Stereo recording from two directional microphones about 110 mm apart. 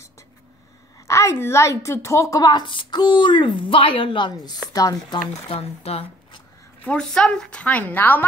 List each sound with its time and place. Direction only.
1.0 s speech: 25° left (ahead or behind)
5.3 s speech: 65° left (ahead or behind)
6.8 s a woman's voice: 10° left (ahead or behind)